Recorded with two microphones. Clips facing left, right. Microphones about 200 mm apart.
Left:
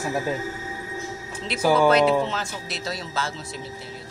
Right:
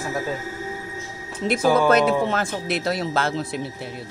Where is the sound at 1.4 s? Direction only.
50° right (ahead or behind).